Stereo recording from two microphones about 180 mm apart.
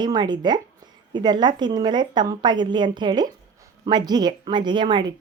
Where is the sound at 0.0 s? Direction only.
25° right (ahead or behind).